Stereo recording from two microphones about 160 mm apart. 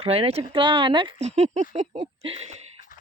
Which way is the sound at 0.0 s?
40° right (ahead or behind).